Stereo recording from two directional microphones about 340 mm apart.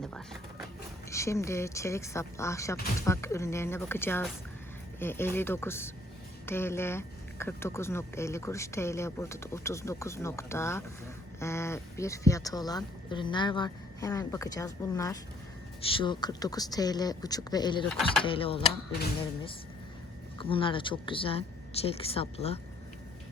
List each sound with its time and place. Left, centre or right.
1.1 s speech: centre
20.4 s speech: centre